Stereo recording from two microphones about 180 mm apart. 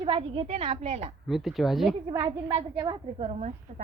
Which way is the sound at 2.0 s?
25° right (ahead or behind).